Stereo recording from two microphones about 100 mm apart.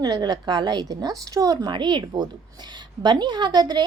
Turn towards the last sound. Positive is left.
turn(degrees=-45)  # may be behind; listen again after turning